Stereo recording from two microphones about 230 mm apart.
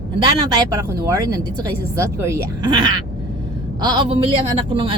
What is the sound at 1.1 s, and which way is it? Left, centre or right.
A woman's voice, centre.